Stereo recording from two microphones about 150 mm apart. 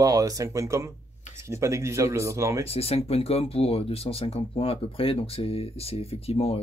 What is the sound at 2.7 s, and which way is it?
Speech, 40° left (ahead or behind).